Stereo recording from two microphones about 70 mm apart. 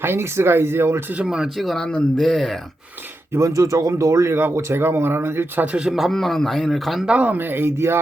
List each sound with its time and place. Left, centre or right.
0.0 s speech: right
1.1 s speech: centre
1.5 s a man's voice: centre
3.3 s speech: right
5.6 s speech: centre
5.9 s a man's voice: centre
7.0 s speech: centre; by 7.9 s right